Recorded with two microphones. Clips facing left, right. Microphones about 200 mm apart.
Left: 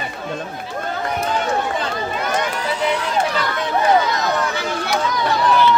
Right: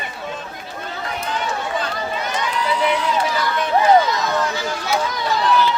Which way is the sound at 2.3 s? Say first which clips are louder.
Left 3 dB; 50° left (ahead or behind).